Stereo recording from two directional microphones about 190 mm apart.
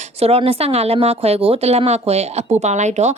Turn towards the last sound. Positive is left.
turn(degrees=-35)  # may be behind; listen again after turning